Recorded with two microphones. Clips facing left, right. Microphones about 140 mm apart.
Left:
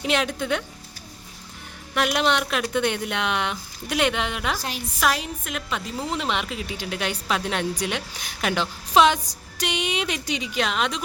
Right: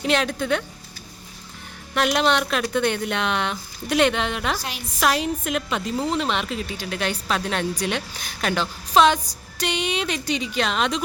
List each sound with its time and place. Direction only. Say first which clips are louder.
0.0 s speech: right 2 dB; 10° left (ahead or behind)
2.0 s a woman's voice: right 2 dB; 10° left (ahead or behind)
6.1 s speech: right 3 dB; 15° left (ahead or behind)